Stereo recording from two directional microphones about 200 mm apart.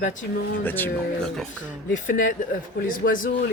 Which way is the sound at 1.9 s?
40° left (ahead or behind).